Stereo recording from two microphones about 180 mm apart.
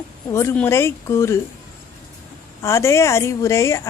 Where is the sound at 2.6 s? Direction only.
15° left (ahead or behind).